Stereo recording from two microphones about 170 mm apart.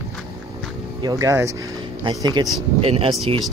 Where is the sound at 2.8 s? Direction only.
35° right (ahead or behind).